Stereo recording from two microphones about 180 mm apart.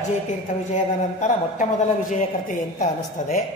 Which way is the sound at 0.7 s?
45° left (ahead or behind).